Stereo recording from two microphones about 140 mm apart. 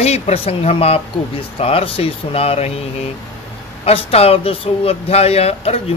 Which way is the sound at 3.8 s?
45° left (ahead or behind).